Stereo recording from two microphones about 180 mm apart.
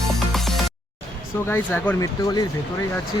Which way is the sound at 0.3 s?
Centre (ahead or behind).